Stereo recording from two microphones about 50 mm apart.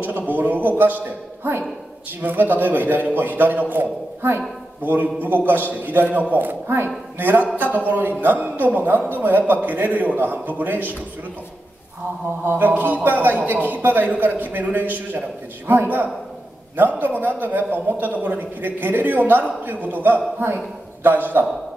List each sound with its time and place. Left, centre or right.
0.3 s a woman's voice: right
12.4 s a man's voice: right